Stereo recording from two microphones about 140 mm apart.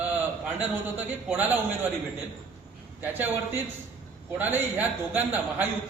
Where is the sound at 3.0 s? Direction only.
15° right (ahead or behind).